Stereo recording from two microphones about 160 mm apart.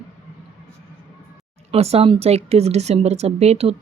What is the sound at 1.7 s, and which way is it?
Speech, 40° right (ahead or behind).